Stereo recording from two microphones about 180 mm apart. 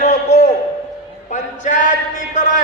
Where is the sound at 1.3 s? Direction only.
45° left (ahead or behind).